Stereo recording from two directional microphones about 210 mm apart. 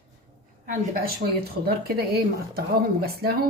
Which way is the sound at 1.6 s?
50° right (ahead or behind).